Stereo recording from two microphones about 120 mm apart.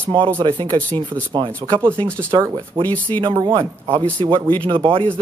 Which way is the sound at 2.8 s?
45° right (ahead or behind).